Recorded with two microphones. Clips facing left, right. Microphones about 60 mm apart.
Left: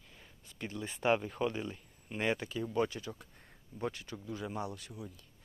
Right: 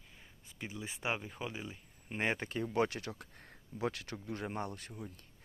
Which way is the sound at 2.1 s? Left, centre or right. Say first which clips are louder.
Left 1 dB; right.